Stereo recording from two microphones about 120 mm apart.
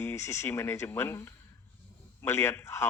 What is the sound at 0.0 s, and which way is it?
Speech, 25° left (ahead or behind).